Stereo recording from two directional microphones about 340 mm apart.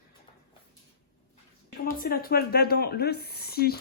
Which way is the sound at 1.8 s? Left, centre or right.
Left.